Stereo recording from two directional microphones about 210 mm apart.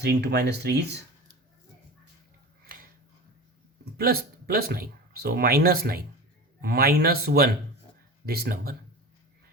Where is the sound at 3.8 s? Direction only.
45° right (ahead or behind).